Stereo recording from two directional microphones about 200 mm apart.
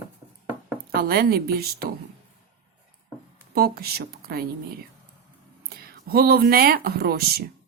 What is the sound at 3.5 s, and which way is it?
Speech, 50° right (ahead or behind).